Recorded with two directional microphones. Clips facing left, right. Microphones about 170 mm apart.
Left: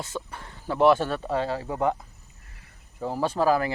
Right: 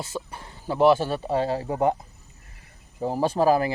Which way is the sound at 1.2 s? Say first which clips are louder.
Right 3 dB; 30° right (ahead or behind).